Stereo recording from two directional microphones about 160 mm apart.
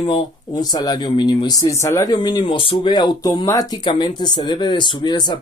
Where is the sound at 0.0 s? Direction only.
25° left (ahead or behind).